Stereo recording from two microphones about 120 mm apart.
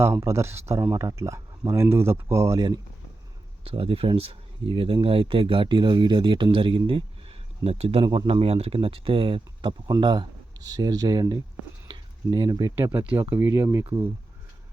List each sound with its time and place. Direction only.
0.0 s speech: 25° right (ahead or behind)
3.6 s speech: 50° right (ahead or behind); by 11.3 s 35° right (ahead or behind)
11.9 s a sound: 40° right (ahead or behind)
12.7 s speech: 20° right (ahead or behind)